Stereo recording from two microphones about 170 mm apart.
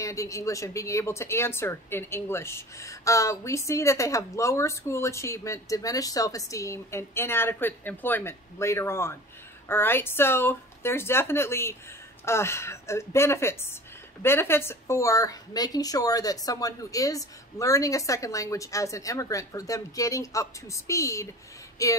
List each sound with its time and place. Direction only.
0.0 s a woman's voice: 20° left (ahead or behind)